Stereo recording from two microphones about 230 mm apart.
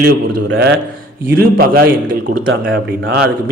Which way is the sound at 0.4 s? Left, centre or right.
Right.